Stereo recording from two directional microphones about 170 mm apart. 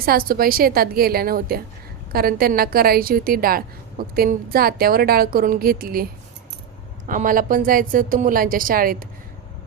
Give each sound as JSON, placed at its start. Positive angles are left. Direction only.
{"t": 0.0, "sound": "a woman's voice", "side_deg": -60}
{"t": 7.1, "sound": "a woman's voice", "side_deg": -50}